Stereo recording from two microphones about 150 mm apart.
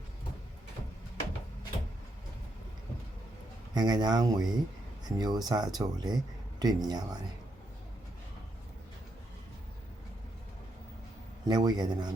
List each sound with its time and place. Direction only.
3.8 s speech: 25° right (ahead or behind)
11.4 s speech: 25° right (ahead or behind)